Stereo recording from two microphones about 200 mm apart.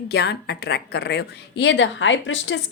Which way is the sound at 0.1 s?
55° left (ahead or behind).